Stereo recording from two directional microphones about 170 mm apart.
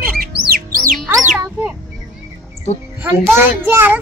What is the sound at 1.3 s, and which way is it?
Children playing, 5° right (ahead or behind).